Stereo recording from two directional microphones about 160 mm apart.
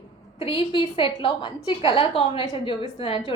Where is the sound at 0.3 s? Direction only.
35° left (ahead or behind).